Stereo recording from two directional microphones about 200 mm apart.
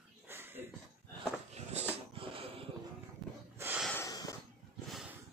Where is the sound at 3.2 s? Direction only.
Centre (ahead or behind).